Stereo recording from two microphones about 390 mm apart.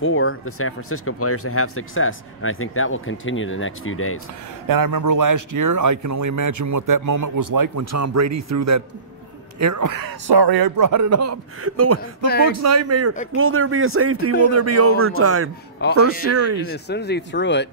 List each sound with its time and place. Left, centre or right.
0.0 s speech: left
4.6 s a man's voice: right
16.7 s speech: left